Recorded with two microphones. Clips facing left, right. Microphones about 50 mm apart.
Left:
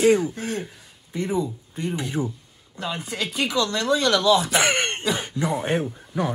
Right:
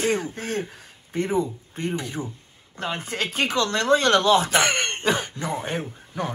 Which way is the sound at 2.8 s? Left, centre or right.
Right.